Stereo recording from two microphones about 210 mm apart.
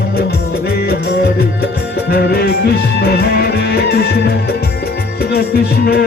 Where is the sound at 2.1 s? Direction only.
50° left (ahead or behind).